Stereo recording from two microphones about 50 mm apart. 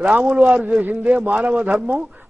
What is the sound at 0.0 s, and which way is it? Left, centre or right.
A man's voice, right.